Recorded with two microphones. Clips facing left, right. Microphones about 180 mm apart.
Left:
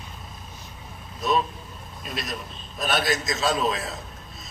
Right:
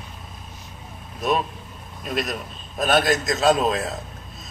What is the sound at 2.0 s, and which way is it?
A man's voice, 55° right (ahead or behind).